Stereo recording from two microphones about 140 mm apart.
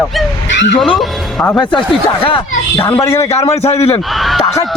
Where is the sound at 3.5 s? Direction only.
50° left (ahead or behind).